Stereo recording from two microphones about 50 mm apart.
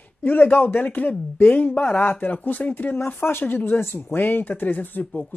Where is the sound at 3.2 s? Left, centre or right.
Left.